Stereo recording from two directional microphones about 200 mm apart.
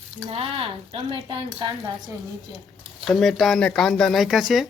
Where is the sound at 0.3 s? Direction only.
30° right (ahead or behind).